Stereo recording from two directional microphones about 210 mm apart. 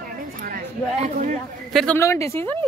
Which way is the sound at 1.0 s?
35° right (ahead or behind).